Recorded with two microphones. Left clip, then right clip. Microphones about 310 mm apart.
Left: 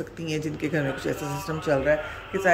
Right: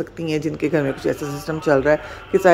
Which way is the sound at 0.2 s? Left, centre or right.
Centre.